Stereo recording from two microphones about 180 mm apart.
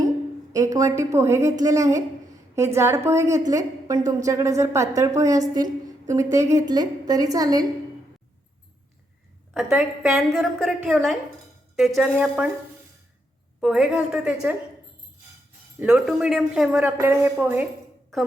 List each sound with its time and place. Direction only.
0.5 s a woman's voice: 20° right (ahead or behind)
9.6 s a woman's voice: 5° right (ahead or behind)
13.6 s a woman's voice: 5° right (ahead or behind)
15.8 s a woman's voice: 5° right (ahead or behind)
16.8 s a woman's voice: 10° right (ahead or behind)